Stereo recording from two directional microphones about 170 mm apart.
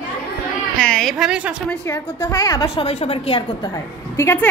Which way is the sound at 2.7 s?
35° left (ahead or behind).